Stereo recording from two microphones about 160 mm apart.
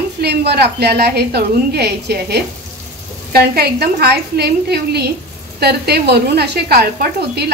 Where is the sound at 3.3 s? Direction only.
75° right (ahead or behind).